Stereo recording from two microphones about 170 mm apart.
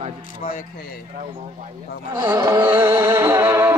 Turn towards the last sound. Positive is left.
turn(degrees=-15)  # may be behind; listen again after turning